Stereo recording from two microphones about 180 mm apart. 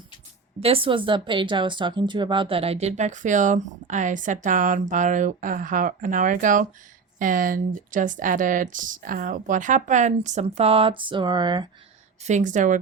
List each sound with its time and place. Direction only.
0.6 s speech: 30° right (ahead or behind)
12.2 s speech: 45° right (ahead or behind)